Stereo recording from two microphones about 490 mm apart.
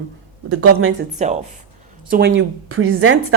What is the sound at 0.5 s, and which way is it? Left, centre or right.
Speech, right.